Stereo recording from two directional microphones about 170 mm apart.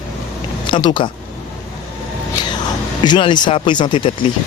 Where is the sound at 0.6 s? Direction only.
30° left (ahead or behind).